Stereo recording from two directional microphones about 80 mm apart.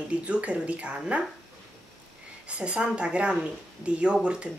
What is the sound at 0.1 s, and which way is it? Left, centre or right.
Speech, centre.